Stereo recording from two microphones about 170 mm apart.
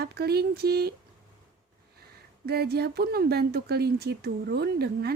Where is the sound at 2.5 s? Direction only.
70° right (ahead or behind).